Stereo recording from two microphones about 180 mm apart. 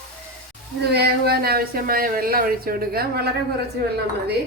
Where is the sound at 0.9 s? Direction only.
60° right (ahead or behind).